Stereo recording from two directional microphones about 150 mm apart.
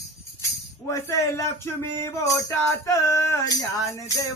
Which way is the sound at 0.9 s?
20° left (ahead or behind).